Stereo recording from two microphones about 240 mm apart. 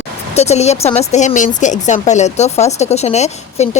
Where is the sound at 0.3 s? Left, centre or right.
Left.